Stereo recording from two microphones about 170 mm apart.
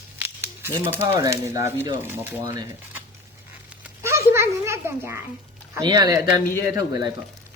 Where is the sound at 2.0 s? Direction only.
15° right (ahead or behind).